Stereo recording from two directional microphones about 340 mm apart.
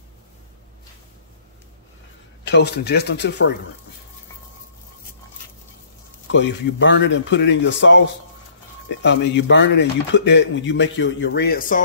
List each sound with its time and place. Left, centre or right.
2.4 s speech: left
6.3 s speech: left